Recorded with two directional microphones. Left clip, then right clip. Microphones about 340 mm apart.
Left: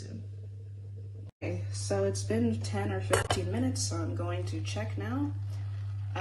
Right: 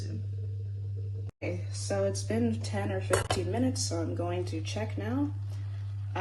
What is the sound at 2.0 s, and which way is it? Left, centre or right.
Speech, centre.